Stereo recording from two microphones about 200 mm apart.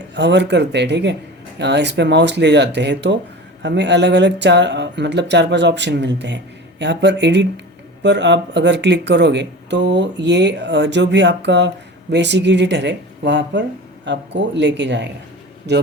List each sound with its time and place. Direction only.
0.1 s speech: 60° right (ahead or behind)